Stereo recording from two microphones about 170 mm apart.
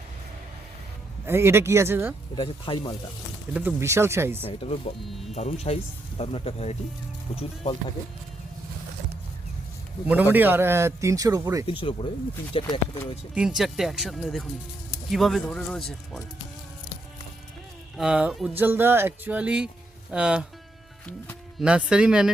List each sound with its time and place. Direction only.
1.2 s speech: 15° right (ahead or behind)
2.3 s speech: 30° left (ahead or behind)
3.5 s speech: 10° right (ahead or behind)
5.3 s speech: 40° left (ahead or behind)
10.1 s speech: 10° right (ahead or behind)
11.6 s speech: 30° left (ahead or behind)
13.3 s speech: 5° right (ahead or behind)
17.9 s speech: 5° right (ahead or behind)
18.5 s speech: 10° right (ahead or behind)
21.6 s speech: 5° right (ahead or behind)